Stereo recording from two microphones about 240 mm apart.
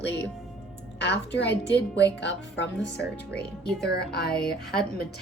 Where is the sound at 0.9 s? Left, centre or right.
Left.